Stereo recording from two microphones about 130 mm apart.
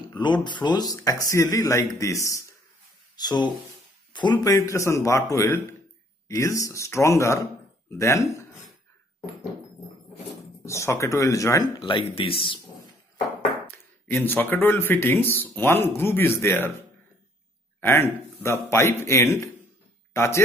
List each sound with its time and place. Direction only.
0.1 s a man's voice: 35° left (ahead or behind)
10.6 s a man's voice: 20° left (ahead or behind)
12.0 s speech: 45° left (ahead or behind)
13.7 s speech: 15° left (ahead or behind)
17.7 s speech: 20° left (ahead or behind)